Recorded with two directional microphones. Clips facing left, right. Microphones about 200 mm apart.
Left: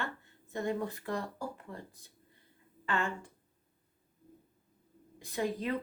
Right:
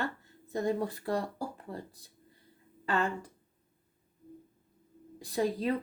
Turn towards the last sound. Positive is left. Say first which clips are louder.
# right 4 dB
turn(degrees=-35)  # may be behind; listen again after turning